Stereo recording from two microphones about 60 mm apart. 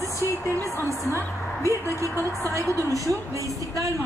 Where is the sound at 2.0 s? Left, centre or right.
Right.